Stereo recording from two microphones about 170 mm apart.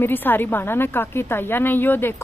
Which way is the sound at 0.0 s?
10° left (ahead or behind).